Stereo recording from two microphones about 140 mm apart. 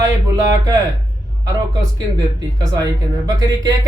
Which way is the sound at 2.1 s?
25° right (ahead or behind).